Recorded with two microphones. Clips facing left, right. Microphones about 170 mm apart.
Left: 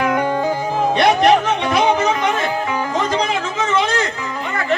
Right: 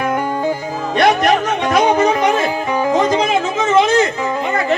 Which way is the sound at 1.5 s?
45° right (ahead or behind).